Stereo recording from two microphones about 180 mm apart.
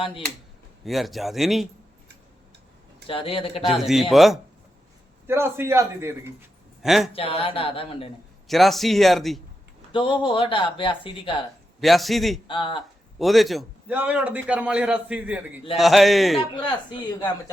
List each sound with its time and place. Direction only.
0.9 s speech: centre (ahead or behind)
3.1 s speech: 30° left (ahead or behind)
3.7 s speech: centre (ahead or behind)
5.2 s a man's voice: 15° right (ahead or behind)
6.8 s speech: centre (ahead or behind)
7.1 s speech: 30° left (ahead or behind)
8.4 s speech: centre (ahead or behind)
9.9 s speech: 30° left (ahead or behind)
11.8 s speech: centre (ahead or behind)
12.5 s speech: 25° left (ahead or behind)
13.1 s a man's voice: centre (ahead or behind)